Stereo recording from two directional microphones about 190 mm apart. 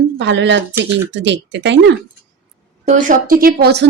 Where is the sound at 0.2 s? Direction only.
70° right (ahead or behind).